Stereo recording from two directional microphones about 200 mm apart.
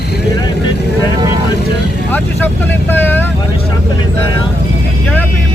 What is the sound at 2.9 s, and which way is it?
Vehicle, 10° left (ahead or behind).